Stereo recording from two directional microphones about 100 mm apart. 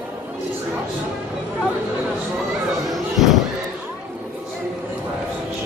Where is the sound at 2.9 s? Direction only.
Centre (ahead or behind).